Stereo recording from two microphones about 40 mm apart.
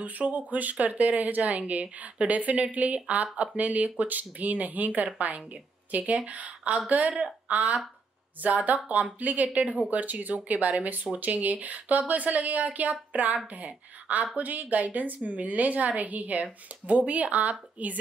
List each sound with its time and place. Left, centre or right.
0.0 s a woman's voice: right